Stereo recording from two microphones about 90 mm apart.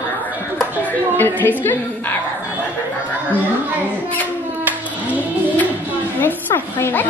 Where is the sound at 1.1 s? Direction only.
20° left (ahead or behind).